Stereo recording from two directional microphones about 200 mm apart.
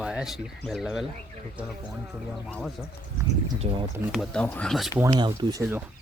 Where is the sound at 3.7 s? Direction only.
30° right (ahead or behind).